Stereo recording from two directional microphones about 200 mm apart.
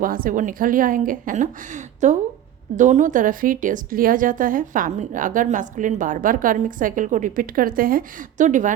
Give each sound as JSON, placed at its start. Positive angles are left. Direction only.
{"t": 0.0, "sound": "a woman's voice", "side_deg": -45}